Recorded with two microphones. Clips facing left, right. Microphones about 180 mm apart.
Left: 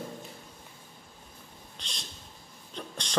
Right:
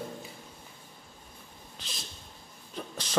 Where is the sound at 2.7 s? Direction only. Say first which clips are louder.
Right 1 dB; 5° right (ahead or behind).